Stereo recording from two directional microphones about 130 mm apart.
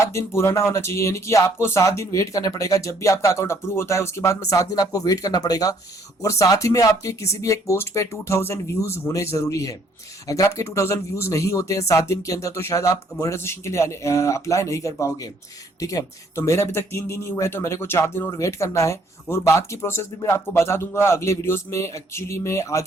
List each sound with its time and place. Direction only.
0.0 s speech: 20° left (ahead or behind)